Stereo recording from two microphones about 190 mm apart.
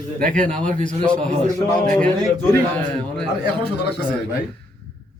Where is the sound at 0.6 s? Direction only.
40° right (ahead or behind).